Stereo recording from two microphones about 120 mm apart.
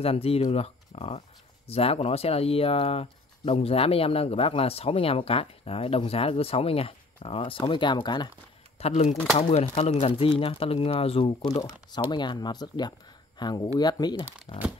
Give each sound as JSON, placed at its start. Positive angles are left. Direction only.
{"t": 0.0, "sound": "speech", "side_deg": 55}
{"t": 8.7, "sound": "speech", "side_deg": 60}
{"t": 11.6, "sound": "speech", "side_deg": 40}
{"t": 14.5, "sound": "speech", "side_deg": 55}